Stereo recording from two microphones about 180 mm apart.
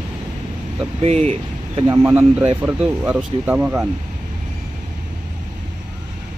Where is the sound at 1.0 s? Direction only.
35° right (ahead or behind).